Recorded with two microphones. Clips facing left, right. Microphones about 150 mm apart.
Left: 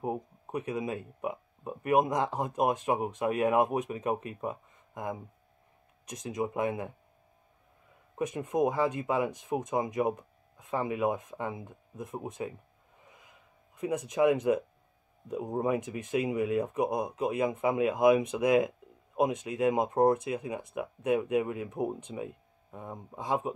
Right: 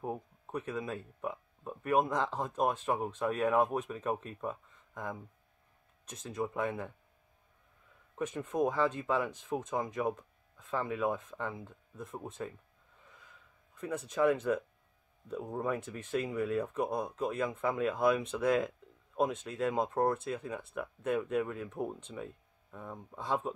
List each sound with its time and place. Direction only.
0.0 s speech: 10° left (ahead or behind)
8.2 s speech: 15° left (ahead or behind)
13.0 s a sound: 15° left (ahead or behind)
15.2 s speech: 15° left (ahead or behind)